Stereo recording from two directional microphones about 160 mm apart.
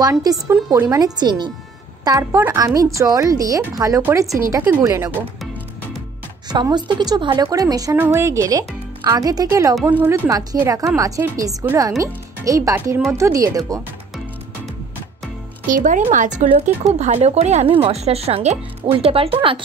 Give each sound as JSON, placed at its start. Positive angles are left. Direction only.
{"t": 0.0, "sound": "a woman's voice", "side_deg": -20}
{"t": 6.5, "sound": "a woman's voice", "side_deg": -25}
{"t": 15.7, "sound": "speech", "side_deg": -55}